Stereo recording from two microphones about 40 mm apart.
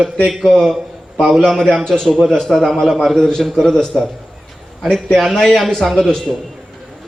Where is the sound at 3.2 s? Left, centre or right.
Centre.